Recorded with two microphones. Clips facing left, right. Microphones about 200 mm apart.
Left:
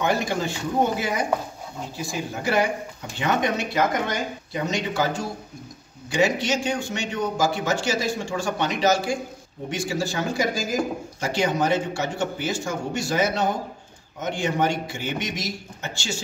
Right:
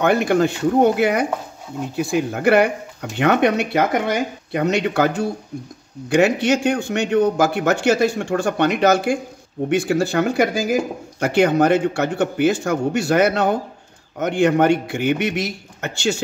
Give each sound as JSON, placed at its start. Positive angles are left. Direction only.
{"t": 0.0, "sound": "speech", "side_deg": -60}